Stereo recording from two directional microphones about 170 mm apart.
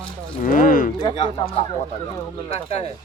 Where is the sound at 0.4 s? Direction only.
55° left (ahead or behind).